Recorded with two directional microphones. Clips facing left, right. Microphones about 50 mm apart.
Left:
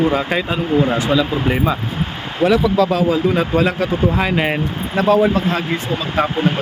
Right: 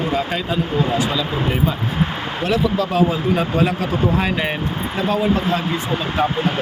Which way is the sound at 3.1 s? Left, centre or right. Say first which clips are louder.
Left 3 dB; left.